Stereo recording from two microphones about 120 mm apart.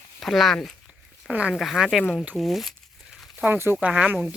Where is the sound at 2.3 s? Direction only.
Centre (ahead or behind).